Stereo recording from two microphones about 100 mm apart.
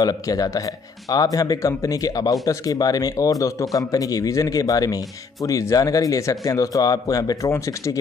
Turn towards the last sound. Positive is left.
turn(degrees=30)  # may be behind; listen again after turning